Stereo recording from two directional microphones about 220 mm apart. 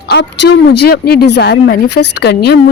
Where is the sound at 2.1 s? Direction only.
50° left (ahead or behind).